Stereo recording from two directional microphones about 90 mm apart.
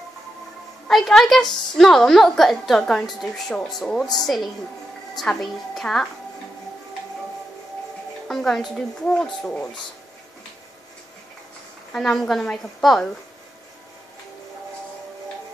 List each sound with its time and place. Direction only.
0.8 s a woman's voice: 5° left (ahead or behind)
8.3 s a woman's voice: 5° left (ahead or behind)
11.9 s a woman's voice: 5° left (ahead or behind)